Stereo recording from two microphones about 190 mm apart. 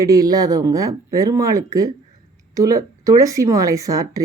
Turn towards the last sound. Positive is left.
turn(degrees=-20)  # may be behind; listen again after turning